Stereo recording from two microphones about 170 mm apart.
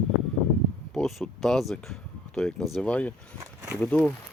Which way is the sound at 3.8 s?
10° left (ahead or behind).